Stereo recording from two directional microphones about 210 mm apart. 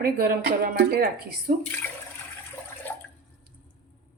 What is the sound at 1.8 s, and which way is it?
Toilet flush, 10° left (ahead or behind).